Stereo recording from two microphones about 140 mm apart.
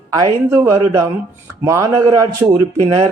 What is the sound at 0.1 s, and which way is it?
Speech, 25° right (ahead or behind).